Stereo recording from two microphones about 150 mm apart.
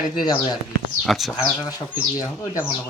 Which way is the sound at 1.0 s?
Centre (ahead or behind).